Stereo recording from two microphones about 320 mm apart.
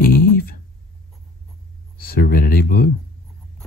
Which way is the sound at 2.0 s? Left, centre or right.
Left.